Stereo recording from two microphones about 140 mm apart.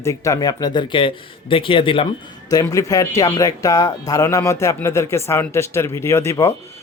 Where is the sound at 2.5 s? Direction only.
25° left (ahead or behind).